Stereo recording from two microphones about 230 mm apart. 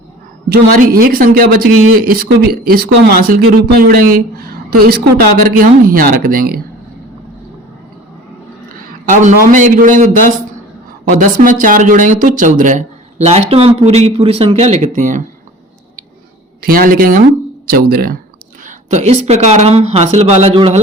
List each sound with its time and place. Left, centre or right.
0.4 s speech: right
6.0 s speech: right
8.7 s a man's voice: right
16.6 s speech: right